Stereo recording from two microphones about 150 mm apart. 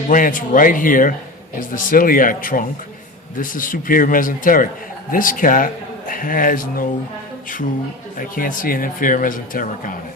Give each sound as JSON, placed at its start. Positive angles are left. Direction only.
{"t": 0.1, "sound": "a man's voice", "side_deg": 60}
{"t": 8.2, "sound": "speech", "side_deg": 65}